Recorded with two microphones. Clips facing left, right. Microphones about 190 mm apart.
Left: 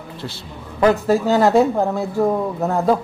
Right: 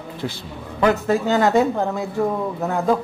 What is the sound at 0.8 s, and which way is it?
A man's voice, 35° left (ahead or behind).